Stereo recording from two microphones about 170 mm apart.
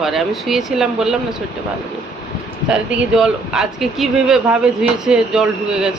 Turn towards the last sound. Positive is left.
turn(degrees=-5)  # may be behind; listen again after turning